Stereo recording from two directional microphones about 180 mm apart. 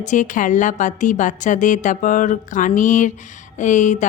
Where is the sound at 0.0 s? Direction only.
45° left (ahead or behind).